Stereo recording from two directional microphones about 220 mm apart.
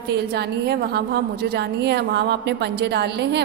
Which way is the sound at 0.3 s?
45° right (ahead or behind).